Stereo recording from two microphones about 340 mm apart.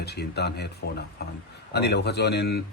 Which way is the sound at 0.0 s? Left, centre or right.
Left.